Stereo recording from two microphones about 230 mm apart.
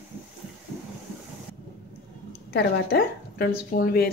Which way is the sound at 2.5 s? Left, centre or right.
Left.